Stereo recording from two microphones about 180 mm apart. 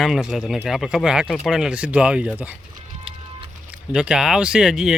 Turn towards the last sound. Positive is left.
turn(degrees=-5)  # may be behind; listen again after turning